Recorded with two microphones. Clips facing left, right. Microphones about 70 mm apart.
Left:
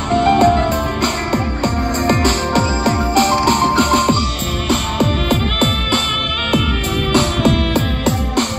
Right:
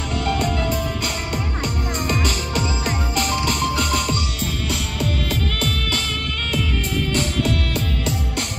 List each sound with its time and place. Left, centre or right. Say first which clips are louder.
0.1 s music: left 12 dB; left
7.1 s music: left 10 dB; left